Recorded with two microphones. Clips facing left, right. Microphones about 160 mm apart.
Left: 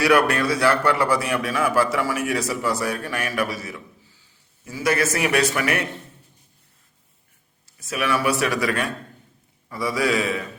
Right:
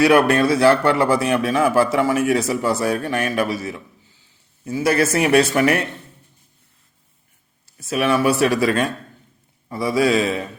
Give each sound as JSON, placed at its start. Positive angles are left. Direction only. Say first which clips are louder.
{"t": 0.0, "sound": "a man's voice", "louder": "right 4 dB", "side_deg": -25}
{"t": 7.8, "sound": "a man's voice", "louder": "right 5 dB", "side_deg": -30}